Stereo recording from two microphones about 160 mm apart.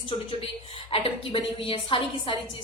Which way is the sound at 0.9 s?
35° left (ahead or behind).